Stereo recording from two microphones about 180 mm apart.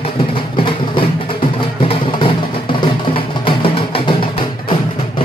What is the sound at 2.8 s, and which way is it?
Music, 30° left (ahead or behind).